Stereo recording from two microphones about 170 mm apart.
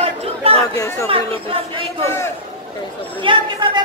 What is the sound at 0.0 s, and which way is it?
Chatter, 35° right (ahead or behind).